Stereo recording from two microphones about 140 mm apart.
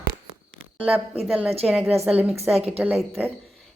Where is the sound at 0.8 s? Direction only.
10° right (ahead or behind).